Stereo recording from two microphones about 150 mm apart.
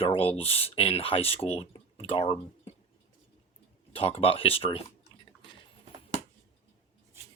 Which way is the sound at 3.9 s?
40° left (ahead or behind).